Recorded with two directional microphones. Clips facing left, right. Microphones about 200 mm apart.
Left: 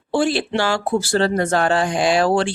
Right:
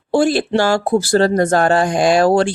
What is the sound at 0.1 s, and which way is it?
Speech, 40° right (ahead or behind).